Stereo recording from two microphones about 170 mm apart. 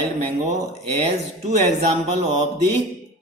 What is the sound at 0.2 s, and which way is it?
Speech, 40° right (ahead or behind).